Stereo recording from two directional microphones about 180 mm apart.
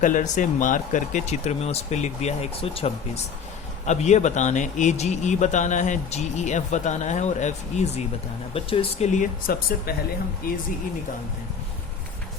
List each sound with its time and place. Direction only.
0.0 s speech: 45° left (ahead or behind)